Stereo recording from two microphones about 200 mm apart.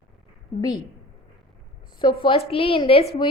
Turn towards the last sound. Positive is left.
turn(degrees=30)  # may be behind; listen again after turning